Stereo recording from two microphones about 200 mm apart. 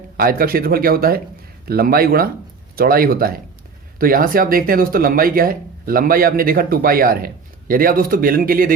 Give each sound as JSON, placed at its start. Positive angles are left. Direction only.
{"t": 0.2, "sound": "speech", "side_deg": -45}